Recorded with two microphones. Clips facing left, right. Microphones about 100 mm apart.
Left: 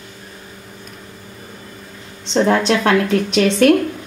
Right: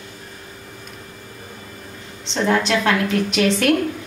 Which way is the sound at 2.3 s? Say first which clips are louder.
Left 4 dB; 35° left (ahead or behind).